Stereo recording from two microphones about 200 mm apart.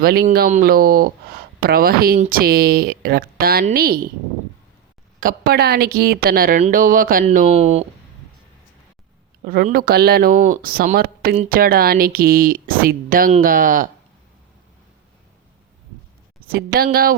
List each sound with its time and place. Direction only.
0.0 s speech: 50° right (ahead or behind)
5.2 s speech: 50° right (ahead or behind)
7.3 s speech: 35° right (ahead or behind)
9.4 s speech: 45° right (ahead or behind)
16.4 s speech: 50° right (ahead or behind)